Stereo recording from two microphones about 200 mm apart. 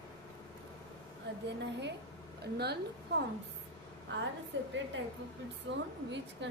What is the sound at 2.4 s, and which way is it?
Speech, 55° right (ahead or behind).